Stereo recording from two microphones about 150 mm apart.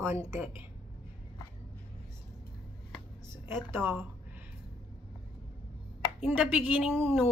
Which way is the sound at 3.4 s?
15° right (ahead or behind).